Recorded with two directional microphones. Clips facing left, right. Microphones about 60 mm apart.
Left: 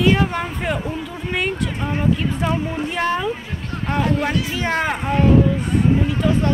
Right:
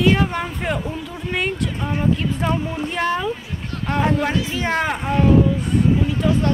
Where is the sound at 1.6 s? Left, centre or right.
Centre.